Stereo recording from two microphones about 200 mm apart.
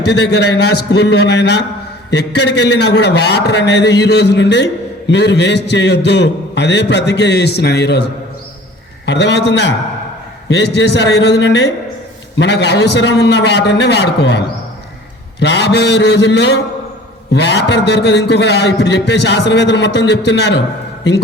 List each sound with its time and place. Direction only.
0.0 s a man's voice: 55° left (ahead or behind)
9.0 s a man's voice: 60° left (ahead or behind)